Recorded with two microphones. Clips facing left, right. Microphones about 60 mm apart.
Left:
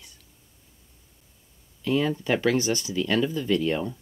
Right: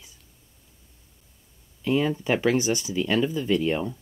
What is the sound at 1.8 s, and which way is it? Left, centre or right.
Speech, centre.